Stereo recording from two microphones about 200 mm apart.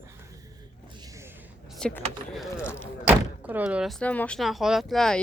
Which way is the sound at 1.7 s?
5° left (ahead or behind).